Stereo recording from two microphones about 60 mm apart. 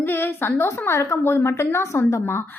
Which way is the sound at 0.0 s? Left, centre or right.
Left.